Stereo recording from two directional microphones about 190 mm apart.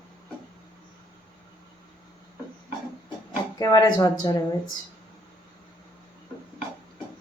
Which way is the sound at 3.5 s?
20° left (ahead or behind).